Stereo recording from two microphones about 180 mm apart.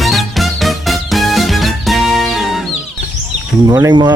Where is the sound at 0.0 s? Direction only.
Centre (ahead or behind).